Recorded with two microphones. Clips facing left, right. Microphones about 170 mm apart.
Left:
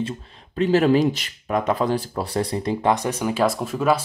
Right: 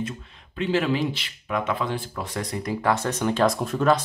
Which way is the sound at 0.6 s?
40° left (ahead or behind).